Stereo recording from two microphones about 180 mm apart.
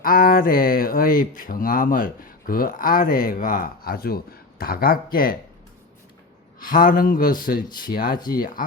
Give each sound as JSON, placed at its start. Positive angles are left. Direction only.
{"t": 0.0, "sound": "speech", "side_deg": 50}
{"t": 6.6, "sound": "speech", "side_deg": 50}